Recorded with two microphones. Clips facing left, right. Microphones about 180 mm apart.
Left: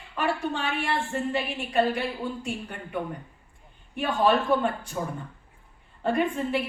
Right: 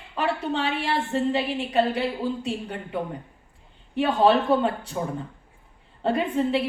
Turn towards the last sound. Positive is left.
turn(degrees=-30)  # may be behind; listen again after turning